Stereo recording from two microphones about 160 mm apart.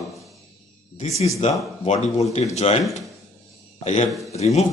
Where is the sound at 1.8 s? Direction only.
45° left (ahead or behind).